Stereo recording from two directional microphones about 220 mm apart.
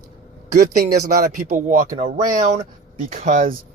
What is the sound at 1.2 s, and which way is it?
Speech, 35° right (ahead or behind).